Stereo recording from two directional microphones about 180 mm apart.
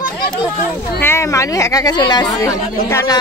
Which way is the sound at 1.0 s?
15° left (ahead or behind).